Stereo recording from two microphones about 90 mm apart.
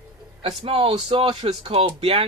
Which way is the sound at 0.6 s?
90° right.